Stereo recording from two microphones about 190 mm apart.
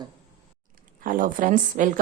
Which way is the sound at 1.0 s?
45° right (ahead or behind).